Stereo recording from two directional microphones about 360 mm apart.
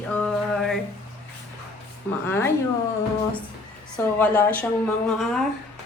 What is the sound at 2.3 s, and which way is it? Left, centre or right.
Speech, centre.